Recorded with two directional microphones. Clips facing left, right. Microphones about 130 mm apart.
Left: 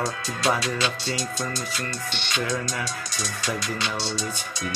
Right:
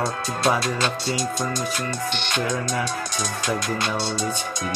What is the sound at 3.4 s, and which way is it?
Speech, 50° right (ahead or behind).